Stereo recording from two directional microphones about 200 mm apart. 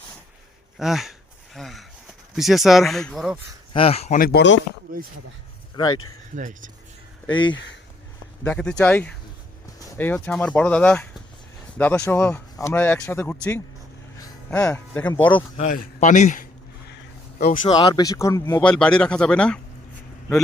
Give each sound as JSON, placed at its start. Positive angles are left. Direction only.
{"t": 0.8, "sound": "speech", "side_deg": 0}
{"t": 1.5, "sound": "a sound", "side_deg": 0}
{"t": 2.3, "sound": "speech", "side_deg": 0}
{"t": 3.7, "sound": "speech", "side_deg": 30}
{"t": 4.2, "sound": "speech", "side_deg": 55}
{"t": 5.7, "sound": "speech", "side_deg": 20}
{"t": 6.3, "sound": "speech", "side_deg": -40}
{"t": 7.3, "sound": "speech", "side_deg": 25}
{"t": 8.4, "sound": "speech", "side_deg": 5}
{"t": 14.7, "sound": "speech", "side_deg": 10}
{"t": 15.5, "sound": "a sound", "side_deg": 35}
{"t": 17.3, "sound": "speech", "side_deg": 40}
{"t": 17.7, "sound": "speech", "side_deg": 20}
{"t": 18.7, "sound": "speech", "side_deg": 5}